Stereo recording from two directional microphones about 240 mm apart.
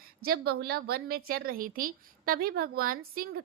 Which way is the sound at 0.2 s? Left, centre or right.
Right.